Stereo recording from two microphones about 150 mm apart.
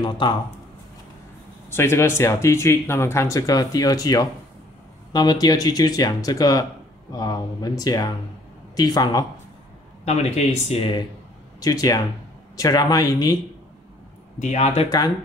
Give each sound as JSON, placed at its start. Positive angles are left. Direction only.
{"t": 0.0, "sound": "speech", "side_deg": 30}
{"t": 1.7, "sound": "speech", "side_deg": 15}
{"t": 10.0, "sound": "speech", "side_deg": 45}
{"t": 11.6, "sound": "speech", "side_deg": 25}
{"t": 14.4, "sound": "speech", "side_deg": 50}